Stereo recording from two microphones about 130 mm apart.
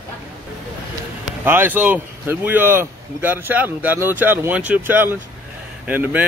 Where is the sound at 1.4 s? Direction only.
15° right (ahead or behind).